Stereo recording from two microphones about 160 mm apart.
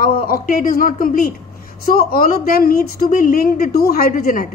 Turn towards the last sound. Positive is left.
turn(degrees=65)  # may be behind; listen again after turning